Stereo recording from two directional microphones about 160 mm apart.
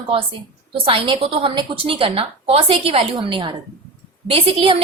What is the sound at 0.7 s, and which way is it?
A woman's voice, 35° right (ahead or behind).